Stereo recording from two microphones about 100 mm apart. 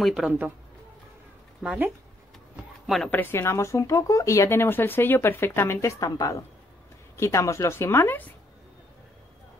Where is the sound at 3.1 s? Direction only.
20° left (ahead or behind).